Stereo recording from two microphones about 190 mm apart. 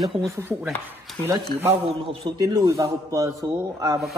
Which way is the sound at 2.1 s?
25° right (ahead or behind).